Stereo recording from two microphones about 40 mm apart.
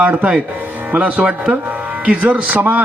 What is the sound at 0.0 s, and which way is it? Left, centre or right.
Speech, right.